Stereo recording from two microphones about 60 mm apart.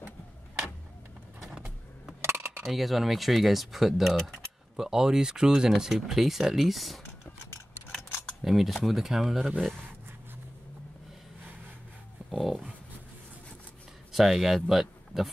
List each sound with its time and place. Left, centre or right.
1.4 s vehicle: centre
2.2 s dishes: right
2.6 s speech: centre
8.4 s speech: centre
12.3 s dog: centre
14.1 s speech: centre